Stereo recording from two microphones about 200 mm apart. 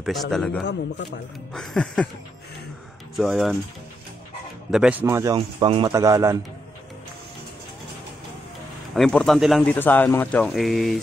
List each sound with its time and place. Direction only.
0.0 s speech: centre (ahead or behind)
3.2 s speech: centre (ahead or behind)
4.6 s speech: 5° right (ahead or behind)
5.0 s a man's voice: 15° right (ahead or behind)
8.9 s speech: centre (ahead or behind)